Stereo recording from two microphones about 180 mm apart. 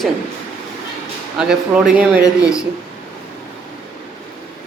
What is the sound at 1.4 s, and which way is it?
Speech, 5° right (ahead or behind).